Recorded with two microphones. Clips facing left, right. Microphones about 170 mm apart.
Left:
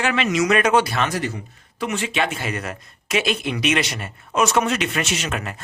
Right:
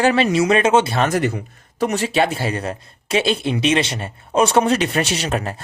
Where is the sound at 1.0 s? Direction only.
55° right (ahead or behind).